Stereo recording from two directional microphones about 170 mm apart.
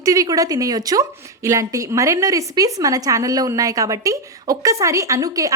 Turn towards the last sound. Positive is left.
turn(degrees=-20)  # may be behind; listen again after turning